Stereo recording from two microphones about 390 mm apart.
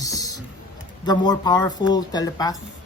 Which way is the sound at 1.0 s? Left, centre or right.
Centre.